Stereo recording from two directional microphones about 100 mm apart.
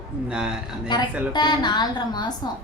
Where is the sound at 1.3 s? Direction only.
45° left (ahead or behind).